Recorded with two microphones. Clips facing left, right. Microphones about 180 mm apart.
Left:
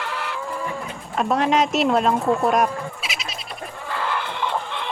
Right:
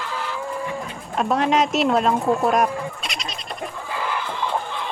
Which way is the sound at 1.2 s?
Centre (ahead or behind).